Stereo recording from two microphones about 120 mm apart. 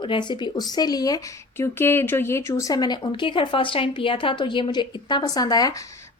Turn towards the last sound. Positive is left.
turn(degrees=35)  # may be behind; listen again after turning